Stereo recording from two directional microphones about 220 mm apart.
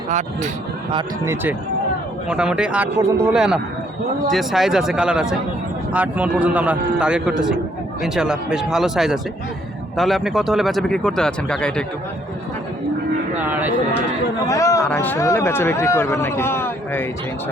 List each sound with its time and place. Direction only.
0.9 s a man's voice: 15° right (ahead or behind); by 11.9 s 5° left (ahead or behind)
13.4 s speech: 5° right (ahead or behind)
14.4 s speech: 15° left (ahead or behind)